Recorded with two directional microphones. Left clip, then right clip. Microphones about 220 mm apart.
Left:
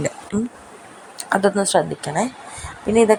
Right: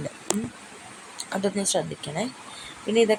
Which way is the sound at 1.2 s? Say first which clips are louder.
Left 9 dB; 15° left (ahead or behind).